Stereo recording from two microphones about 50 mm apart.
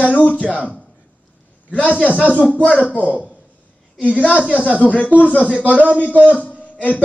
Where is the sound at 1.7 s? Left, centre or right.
Left.